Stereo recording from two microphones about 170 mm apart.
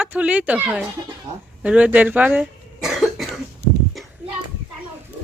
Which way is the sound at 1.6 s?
10° right (ahead or behind).